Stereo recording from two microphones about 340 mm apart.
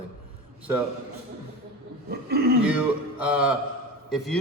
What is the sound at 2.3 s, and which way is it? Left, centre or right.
Speech, right.